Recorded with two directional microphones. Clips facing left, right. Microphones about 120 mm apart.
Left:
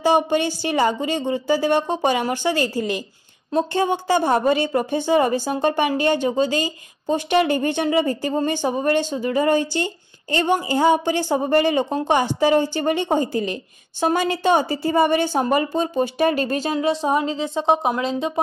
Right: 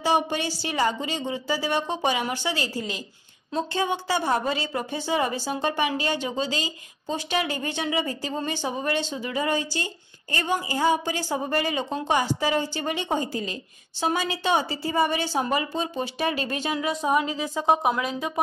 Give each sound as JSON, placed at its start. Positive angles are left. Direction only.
{"t": 0.0, "sound": "a woman's voice", "side_deg": 50}
{"t": 0.7, "sound": "a woman's voice", "side_deg": 15}
{"t": 1.0, "sound": "a woman's voice", "side_deg": 50}